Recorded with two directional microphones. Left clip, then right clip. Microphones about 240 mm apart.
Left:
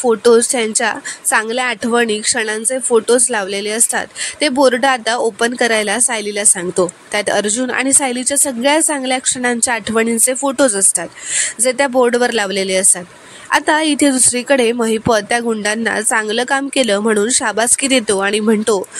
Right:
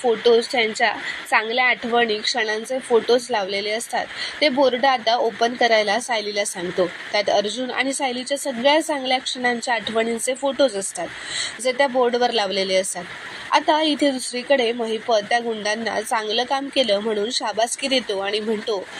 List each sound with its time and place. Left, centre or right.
0.0 s speech: left